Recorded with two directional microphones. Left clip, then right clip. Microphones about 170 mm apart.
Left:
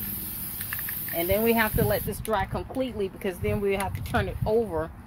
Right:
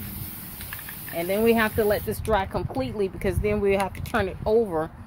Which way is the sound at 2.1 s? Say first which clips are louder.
Right 3 dB; 65° right (ahead or behind).